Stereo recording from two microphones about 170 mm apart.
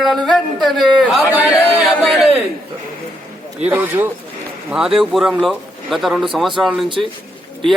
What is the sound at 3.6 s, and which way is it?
A man's voice, 10° right (ahead or behind).